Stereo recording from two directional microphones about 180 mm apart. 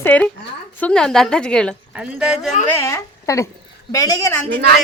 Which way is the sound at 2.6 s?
15° left (ahead or behind).